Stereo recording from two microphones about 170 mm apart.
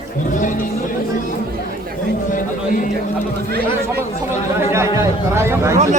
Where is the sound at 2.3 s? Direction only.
50° left (ahead or behind).